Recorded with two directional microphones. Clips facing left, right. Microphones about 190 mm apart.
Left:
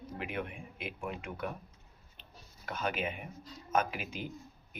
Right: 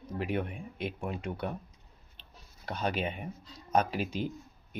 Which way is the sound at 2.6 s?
35° right (ahead or behind).